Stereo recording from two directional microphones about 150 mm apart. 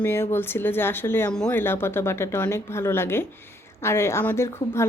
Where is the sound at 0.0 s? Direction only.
15° left (ahead or behind).